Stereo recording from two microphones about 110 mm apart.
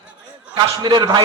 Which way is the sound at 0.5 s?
40° right (ahead or behind).